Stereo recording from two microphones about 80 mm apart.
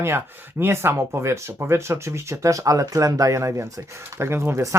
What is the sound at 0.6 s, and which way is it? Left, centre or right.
Speech, right.